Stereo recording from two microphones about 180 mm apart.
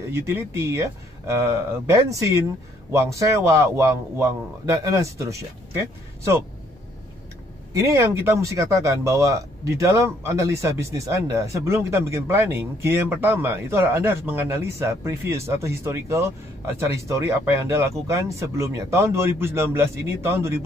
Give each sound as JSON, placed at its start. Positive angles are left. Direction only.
{"t": 0.1, "sound": "speech", "side_deg": -15}
{"t": 7.7, "sound": "speech", "side_deg": -15}